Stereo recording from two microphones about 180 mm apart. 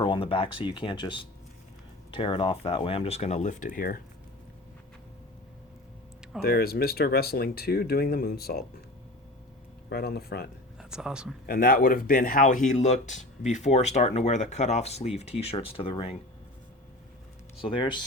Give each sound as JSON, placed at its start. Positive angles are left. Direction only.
{"t": 0.0, "sound": "speech", "side_deg": 30}
{"t": 6.4, "sound": "speech", "side_deg": 60}
{"t": 9.9, "sound": "speech", "side_deg": 60}
{"t": 10.8, "sound": "speech", "side_deg": -5}
{"t": 11.4, "sound": "speech", "side_deg": 55}
{"t": 17.6, "sound": "speech", "side_deg": 25}